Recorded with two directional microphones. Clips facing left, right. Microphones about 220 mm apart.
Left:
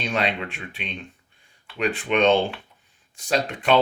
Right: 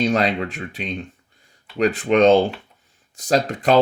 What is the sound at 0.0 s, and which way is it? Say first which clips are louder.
Speech: right 6 dB; 40° right (ahead or behind).